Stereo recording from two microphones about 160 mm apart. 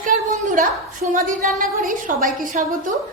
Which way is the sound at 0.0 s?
55° right (ahead or behind).